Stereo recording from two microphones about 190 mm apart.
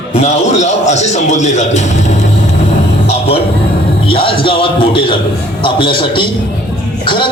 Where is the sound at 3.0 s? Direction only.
30° left (ahead or behind).